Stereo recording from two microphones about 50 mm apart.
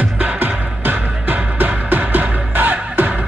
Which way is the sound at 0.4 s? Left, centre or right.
Right.